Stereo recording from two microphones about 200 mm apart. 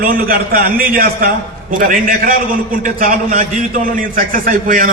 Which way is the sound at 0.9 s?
50° right (ahead or behind).